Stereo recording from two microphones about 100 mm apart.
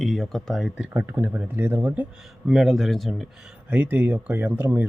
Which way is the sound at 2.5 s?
Centre (ahead or behind).